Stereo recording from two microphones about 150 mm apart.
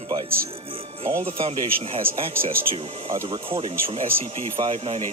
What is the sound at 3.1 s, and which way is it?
Speech, 30° right (ahead or behind).